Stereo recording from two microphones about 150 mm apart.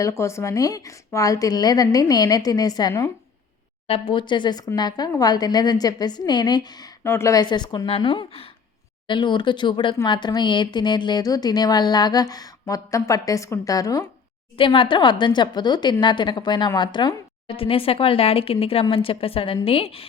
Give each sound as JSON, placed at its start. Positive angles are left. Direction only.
{"t": 0.0, "sound": "speech", "side_deg": 20}
{"t": 3.8, "sound": "a woman's voice", "side_deg": 35}
{"t": 14.6, "sound": "a woman's voice", "side_deg": 35}